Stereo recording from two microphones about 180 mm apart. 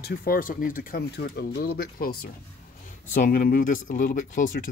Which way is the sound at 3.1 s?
50° left (ahead or behind).